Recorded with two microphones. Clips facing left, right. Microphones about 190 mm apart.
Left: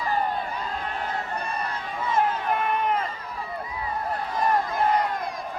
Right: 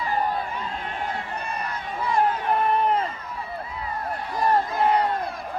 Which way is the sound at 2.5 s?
35° right (ahead or behind).